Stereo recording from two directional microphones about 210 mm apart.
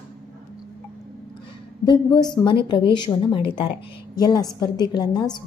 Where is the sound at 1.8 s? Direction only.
20° left (ahead or behind).